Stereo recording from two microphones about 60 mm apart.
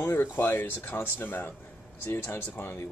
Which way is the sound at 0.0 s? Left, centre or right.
Left.